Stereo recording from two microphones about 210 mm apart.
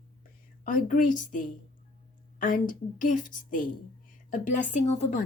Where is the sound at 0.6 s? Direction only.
40° left (ahead or behind).